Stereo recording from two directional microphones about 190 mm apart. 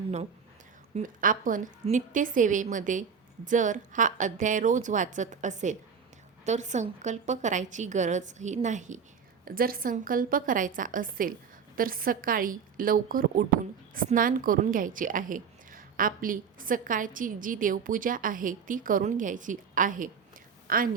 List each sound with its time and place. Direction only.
0.9 s a woman's voice: 45° right (ahead or behind)